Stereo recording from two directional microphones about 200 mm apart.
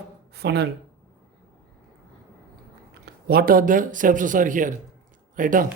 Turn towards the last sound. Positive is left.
turn(degrees=-40)  # may be behind; listen again after turning